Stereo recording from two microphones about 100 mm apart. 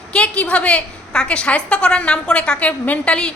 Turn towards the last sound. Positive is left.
turn(degrees=10)  # may be behind; listen again after turning